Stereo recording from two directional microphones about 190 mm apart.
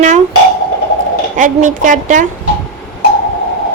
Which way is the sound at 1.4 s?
45° right (ahead or behind).